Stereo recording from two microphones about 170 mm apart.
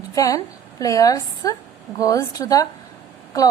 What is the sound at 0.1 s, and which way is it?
A woman's voice, 20° left (ahead or behind).